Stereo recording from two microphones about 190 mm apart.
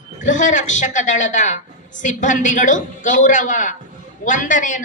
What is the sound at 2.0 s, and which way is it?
A man's voice, 40° left (ahead or behind).